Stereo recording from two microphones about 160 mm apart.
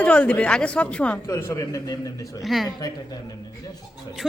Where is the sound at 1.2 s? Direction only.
15° left (ahead or behind).